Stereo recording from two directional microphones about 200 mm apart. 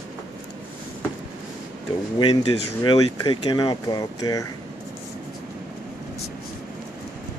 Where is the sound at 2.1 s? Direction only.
20° left (ahead or behind).